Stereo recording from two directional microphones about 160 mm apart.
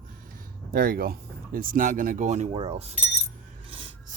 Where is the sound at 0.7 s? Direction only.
65° right (ahead or behind); by 3.0 s 40° right (ahead or behind).